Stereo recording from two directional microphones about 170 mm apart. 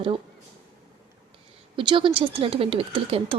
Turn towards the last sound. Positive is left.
turn(degrees=-35)  # may be behind; listen again after turning